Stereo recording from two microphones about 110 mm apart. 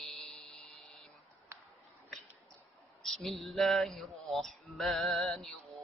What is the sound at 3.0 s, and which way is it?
Speech, centre (ahead or behind).